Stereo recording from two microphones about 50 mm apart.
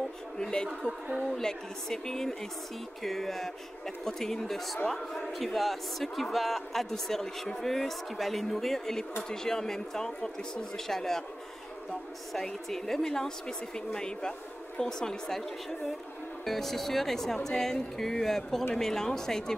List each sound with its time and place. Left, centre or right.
0.4 s a woman's voice: centre
16.4 s a woman's voice: centre